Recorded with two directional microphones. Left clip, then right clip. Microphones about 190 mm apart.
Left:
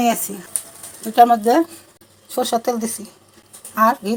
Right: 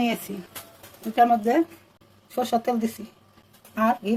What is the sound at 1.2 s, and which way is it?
Speech, 20° left (ahead or behind).